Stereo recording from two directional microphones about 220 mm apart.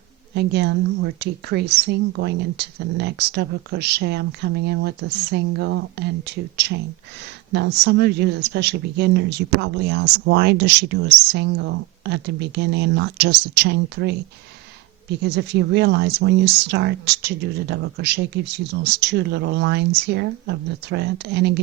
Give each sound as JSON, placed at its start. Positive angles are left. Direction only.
{"t": 0.3, "sound": "speech", "side_deg": -50}
{"t": 15.2, "sound": "speech", "side_deg": -50}